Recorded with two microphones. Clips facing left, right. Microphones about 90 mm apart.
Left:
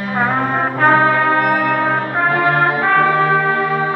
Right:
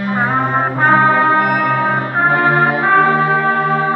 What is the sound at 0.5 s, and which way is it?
Brass instrument, 20° right (ahead or behind).